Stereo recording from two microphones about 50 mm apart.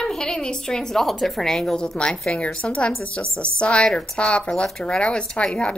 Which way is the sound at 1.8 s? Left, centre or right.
Centre.